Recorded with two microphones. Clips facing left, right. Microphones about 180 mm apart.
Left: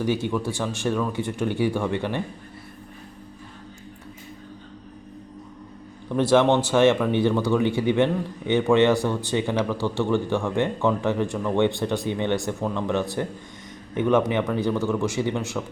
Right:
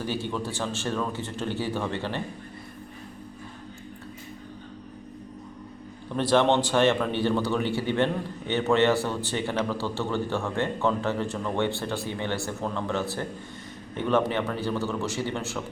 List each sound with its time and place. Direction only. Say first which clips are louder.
0.0 s a man's voice: left 6 dB; 15° left (ahead or behind)
6.3 s a man's voice: left 3 dB; 10° left (ahead or behind)